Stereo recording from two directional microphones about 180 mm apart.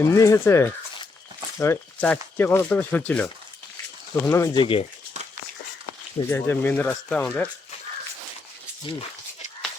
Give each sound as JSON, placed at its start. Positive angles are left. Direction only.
{"t": 0.0, "sound": "speech", "side_deg": 15}
{"t": 4.6, "sound": "speech", "side_deg": 30}
{"t": 6.2, "sound": "speech", "side_deg": 10}